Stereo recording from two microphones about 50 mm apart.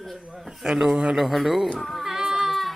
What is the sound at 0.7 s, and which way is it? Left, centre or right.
Speech, centre.